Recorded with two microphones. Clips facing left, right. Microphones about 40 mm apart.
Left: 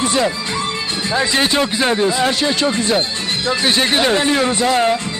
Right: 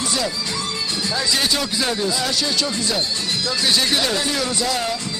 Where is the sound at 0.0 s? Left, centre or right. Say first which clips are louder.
Left 6 dB; left.